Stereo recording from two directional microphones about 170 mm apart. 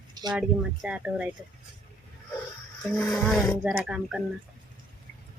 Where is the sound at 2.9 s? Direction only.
10° left (ahead or behind).